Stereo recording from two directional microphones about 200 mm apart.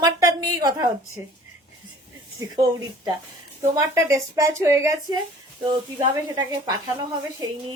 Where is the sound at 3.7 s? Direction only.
15° right (ahead or behind).